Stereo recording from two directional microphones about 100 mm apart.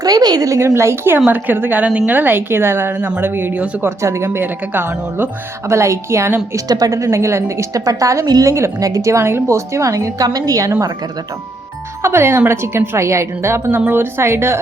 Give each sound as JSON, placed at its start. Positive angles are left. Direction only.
{"t": 0.0, "sound": "a woman's voice", "side_deg": -40}
{"t": 6.7, "sound": "a woman's voice", "side_deg": -40}
{"t": 12.0, "sound": "speech", "side_deg": -25}